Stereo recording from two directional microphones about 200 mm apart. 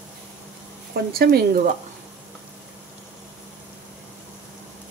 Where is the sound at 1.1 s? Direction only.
50° right (ahead or behind).